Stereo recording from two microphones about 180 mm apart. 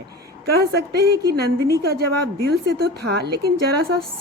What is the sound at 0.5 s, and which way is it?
A woman's voice, 60° right (ahead or behind).